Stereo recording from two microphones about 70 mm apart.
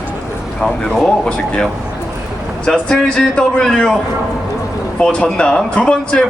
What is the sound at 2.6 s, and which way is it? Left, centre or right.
Speech, centre.